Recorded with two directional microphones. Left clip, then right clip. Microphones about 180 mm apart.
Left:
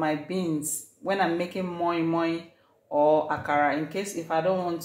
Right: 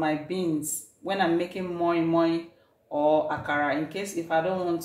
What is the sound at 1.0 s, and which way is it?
Speech, 30° left (ahead or behind).